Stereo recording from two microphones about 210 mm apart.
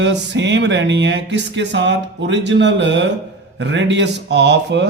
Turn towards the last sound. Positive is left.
turn(degrees=-55)  # may be behind; listen again after turning